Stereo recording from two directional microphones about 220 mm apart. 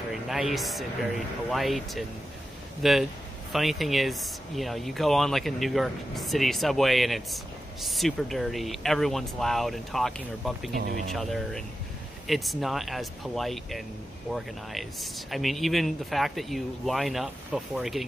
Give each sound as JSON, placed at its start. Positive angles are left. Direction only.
{"t": 0.1, "sound": "speech", "side_deg": 0}
{"t": 10.7, "sound": "speech", "side_deg": -40}
{"t": 11.1, "sound": "speech", "side_deg": 0}